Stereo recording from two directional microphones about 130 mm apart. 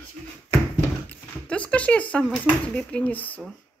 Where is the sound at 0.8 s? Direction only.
10° left (ahead or behind).